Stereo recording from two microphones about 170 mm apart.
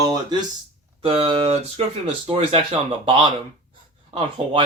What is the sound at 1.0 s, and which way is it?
Speech, 35° right (ahead or behind).